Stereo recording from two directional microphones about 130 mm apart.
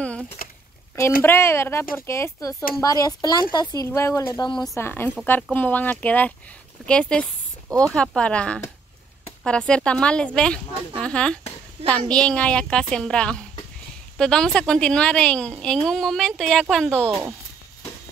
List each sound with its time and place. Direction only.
0.4 s a sound: 90° left
1.2 s speech: 20° left (ahead or behind)
4.4 s speech: 35° left (ahead or behind)
4.7 s a woman's voice: 15° left (ahead or behind)
17.1 s speech: 20° right (ahead or behind)